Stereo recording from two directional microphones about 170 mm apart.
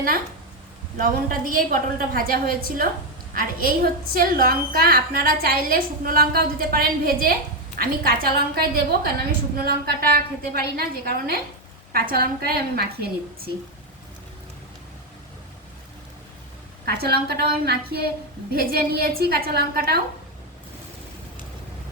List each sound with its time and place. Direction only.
0.9 s a woman's voice: 55° right (ahead or behind)
12.1 s a woman's voice: 65° right (ahead or behind)
16.8 s a woman's voice: 65° right (ahead or behind)